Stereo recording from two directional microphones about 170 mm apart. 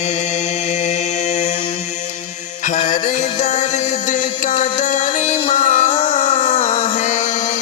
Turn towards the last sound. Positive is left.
turn(degrees=45)  # may be behind; listen again after turning